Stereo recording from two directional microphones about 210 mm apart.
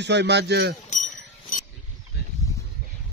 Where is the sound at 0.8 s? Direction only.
35° left (ahead or behind).